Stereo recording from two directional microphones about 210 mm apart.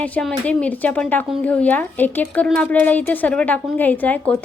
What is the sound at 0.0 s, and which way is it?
A woman's voice, 5° left (ahead or behind).